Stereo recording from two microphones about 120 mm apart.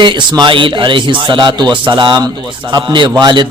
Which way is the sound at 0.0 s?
40° right (ahead or behind).